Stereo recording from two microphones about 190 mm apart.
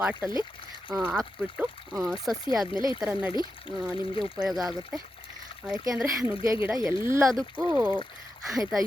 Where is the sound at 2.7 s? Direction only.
25° left (ahead or behind).